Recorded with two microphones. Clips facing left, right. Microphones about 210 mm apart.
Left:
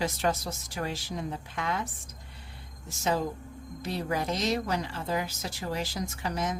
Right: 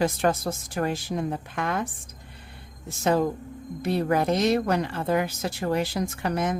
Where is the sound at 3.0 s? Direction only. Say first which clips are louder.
Right 6 dB; 55° right (ahead or behind).